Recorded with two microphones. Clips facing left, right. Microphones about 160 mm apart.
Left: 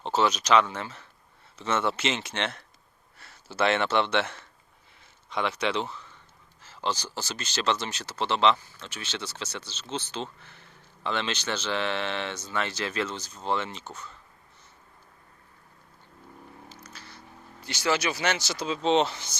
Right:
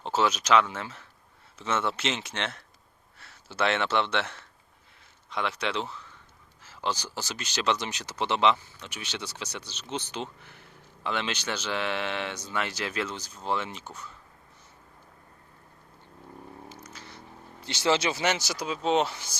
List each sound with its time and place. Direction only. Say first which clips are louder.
0.0 s speech: left 1 dB; 5° right (ahead or behind)
16.6 s a sound: right 2 dB; 20° right (ahead or behind)
17.6 s speech: right 2 dB; 25° right (ahead or behind)
18.4 s speech: left 2 dB; 10° right (ahead or behind)